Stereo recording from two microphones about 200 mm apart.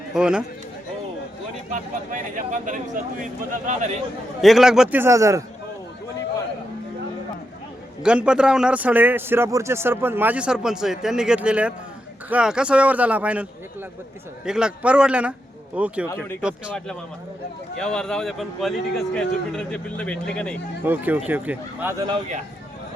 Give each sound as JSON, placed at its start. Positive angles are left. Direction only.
{"t": 0.1, "sound": "a man's voice", "side_deg": -5}
{"t": 1.7, "sound": "speech", "side_deg": -40}
{"t": 4.4, "sound": "a man's voice", "side_deg": 0}
{"t": 8.0, "sound": "a man's voice", "side_deg": -5}
{"t": 20.8, "sound": "speech", "side_deg": -10}